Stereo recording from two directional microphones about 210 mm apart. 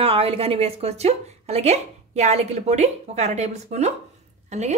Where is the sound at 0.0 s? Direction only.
25° right (ahead or behind).